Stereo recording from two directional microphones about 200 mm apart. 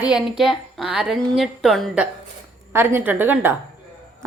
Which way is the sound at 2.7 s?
10° right (ahead or behind).